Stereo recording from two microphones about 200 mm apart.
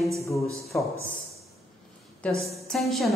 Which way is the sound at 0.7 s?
10° left (ahead or behind).